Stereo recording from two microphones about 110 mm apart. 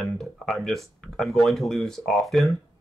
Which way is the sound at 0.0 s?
5° left (ahead or behind).